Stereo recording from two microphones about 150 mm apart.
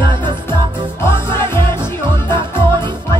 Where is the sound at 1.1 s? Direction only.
15° left (ahead or behind).